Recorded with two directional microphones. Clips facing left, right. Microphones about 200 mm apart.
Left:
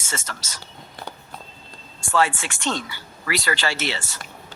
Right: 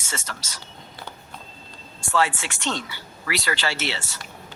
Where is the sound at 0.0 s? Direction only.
50° left (ahead or behind).